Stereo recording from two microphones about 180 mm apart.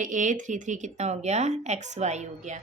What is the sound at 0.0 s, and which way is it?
Speech, 45° right (ahead or behind).